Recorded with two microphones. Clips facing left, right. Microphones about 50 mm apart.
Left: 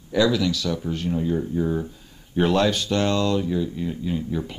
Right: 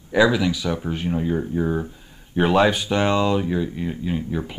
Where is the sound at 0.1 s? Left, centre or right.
Right.